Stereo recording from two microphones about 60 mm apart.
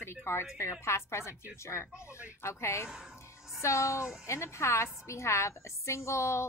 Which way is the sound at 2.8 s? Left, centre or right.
Centre.